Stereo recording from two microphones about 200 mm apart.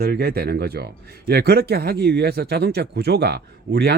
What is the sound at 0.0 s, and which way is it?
Speech, 50° right (ahead or behind).